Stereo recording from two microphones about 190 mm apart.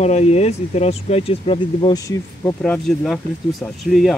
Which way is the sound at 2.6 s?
5° left (ahead or behind).